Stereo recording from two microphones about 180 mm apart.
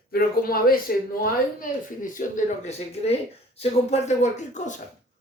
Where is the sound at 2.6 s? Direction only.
35° left (ahead or behind).